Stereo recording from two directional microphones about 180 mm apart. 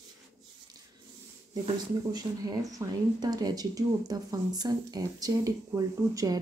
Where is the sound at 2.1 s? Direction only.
20° right (ahead or behind).